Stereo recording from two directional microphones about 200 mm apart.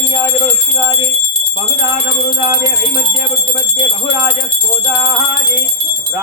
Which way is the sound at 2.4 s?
20° right (ahead or behind).